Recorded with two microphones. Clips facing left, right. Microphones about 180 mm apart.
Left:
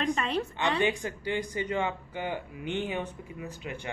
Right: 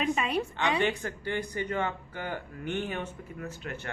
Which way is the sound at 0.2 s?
10° right (ahead or behind).